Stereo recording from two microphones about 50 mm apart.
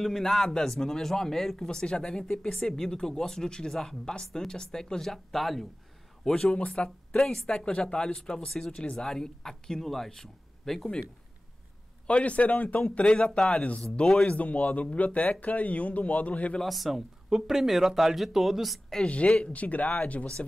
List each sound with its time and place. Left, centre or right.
0.0 s speech: centre
6.3 s speech: left
12.1 s speech: left
16.6 s speech: centre
19.0 s speech: left